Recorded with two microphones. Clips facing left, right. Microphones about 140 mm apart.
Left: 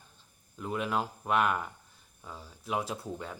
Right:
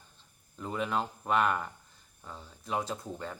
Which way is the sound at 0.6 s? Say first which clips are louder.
Even; 5° left (ahead or behind).